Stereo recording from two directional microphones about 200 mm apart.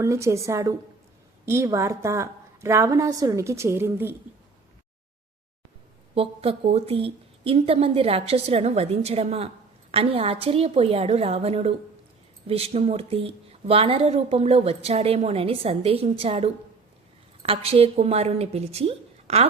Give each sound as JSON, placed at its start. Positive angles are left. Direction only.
{"t": 0.0, "sound": "a woman's voice", "side_deg": -15}
{"t": 6.1, "sound": "a woman's voice", "side_deg": -30}